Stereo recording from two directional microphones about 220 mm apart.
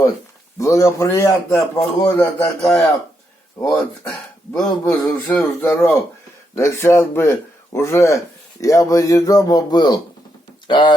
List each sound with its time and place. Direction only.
0.6 s a man's voice: 15° left (ahead or behind)
4.0 s speech: 10° left (ahead or behind)